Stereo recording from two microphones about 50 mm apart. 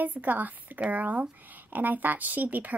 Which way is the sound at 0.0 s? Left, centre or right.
Right.